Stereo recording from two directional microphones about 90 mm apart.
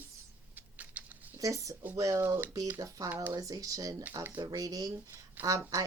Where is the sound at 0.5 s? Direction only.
15° right (ahead or behind).